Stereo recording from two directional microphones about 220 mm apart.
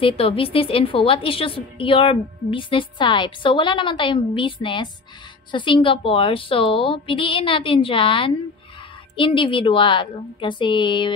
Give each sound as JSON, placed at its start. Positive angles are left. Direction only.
{"t": 0.0, "sound": "a woman's voice", "side_deg": 25}